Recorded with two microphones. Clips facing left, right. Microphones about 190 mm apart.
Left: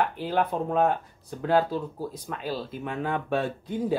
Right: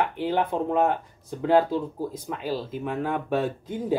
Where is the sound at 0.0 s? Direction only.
20° right (ahead or behind).